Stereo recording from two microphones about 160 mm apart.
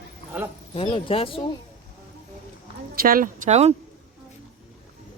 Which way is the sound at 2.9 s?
65° right (ahead or behind).